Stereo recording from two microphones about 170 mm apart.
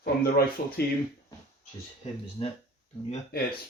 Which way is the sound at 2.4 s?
35° left (ahead or behind).